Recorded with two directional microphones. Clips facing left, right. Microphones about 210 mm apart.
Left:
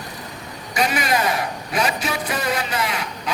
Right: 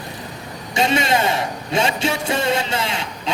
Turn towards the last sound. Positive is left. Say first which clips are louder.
# right 1 dB
turn(degrees=-25)  # may be behind; listen again after turning